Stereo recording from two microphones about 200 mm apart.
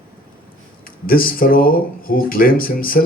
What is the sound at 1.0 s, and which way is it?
Speech, 45° left (ahead or behind).